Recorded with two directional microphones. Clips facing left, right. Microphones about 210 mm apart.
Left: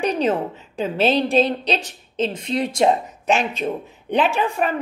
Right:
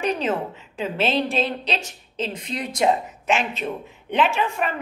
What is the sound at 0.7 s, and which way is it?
A woman's voice, 35° left (ahead or behind).